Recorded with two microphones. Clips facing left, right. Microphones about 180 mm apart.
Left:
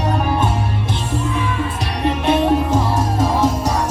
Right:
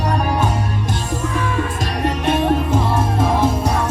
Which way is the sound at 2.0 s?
50° right (ahead or behind).